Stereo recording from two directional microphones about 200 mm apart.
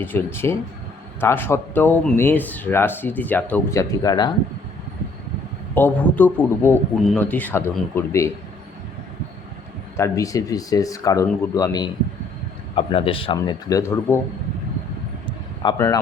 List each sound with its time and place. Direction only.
0.0 s speech: 10° left (ahead or behind)
5.7 s speech: 10° left (ahead or behind)
10.0 s a man's voice: 15° left (ahead or behind)
15.3 s a sound: 20° left (ahead or behind)